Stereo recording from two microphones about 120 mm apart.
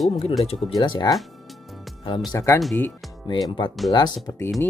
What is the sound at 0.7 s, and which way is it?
Speech, 35° left (ahead or behind).